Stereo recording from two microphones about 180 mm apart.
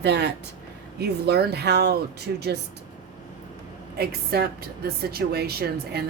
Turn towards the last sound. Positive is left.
turn(degrees=-65)  # may be behind; listen again after turning